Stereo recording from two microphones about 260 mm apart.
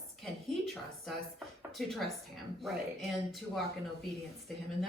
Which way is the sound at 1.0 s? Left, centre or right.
Centre.